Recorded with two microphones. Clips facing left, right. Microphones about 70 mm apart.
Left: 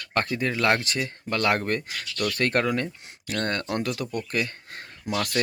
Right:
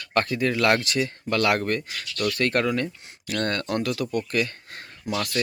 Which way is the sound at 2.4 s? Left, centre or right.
Left.